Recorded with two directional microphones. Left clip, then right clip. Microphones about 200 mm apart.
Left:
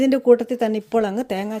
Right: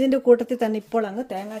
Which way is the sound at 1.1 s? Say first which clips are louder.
Left 5 dB; 50° left (ahead or behind).